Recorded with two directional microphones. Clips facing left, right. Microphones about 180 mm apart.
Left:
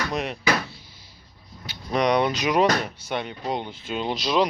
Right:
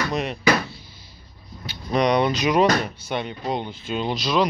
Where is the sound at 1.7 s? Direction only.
10° left (ahead or behind).